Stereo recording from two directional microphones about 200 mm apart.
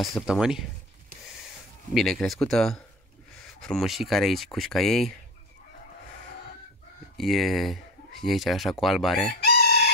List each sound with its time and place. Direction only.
0.0 s speech: centre (ahead or behind)
2.0 s speech: centre (ahead or behind)
7.2 s speech: centre (ahead or behind)
9.4 s chicken: 50° left (ahead or behind)